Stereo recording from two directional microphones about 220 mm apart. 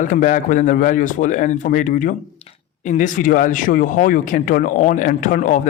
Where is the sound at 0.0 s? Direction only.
35° left (ahead or behind).